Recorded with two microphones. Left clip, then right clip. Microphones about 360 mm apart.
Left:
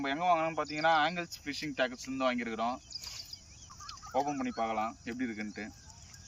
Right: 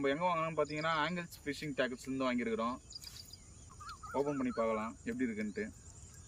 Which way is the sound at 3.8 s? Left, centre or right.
Centre.